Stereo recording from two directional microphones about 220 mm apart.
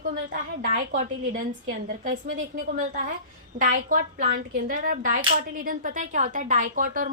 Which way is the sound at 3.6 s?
35° right (ahead or behind).